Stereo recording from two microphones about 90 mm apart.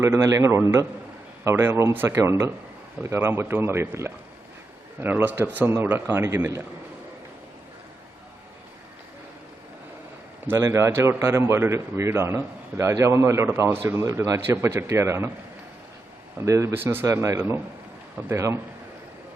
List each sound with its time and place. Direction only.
0.0 s a man's voice: 35° right (ahead or behind)
10.6 s a man's voice: 35° right (ahead or behind)
16.4 s a man's voice: 30° right (ahead or behind)